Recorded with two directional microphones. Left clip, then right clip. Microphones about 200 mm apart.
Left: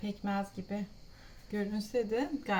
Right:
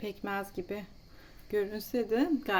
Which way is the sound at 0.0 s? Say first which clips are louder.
Right 1 dB; 55° right (ahead or behind).